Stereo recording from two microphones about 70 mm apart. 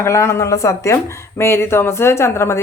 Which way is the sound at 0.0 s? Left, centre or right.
Left.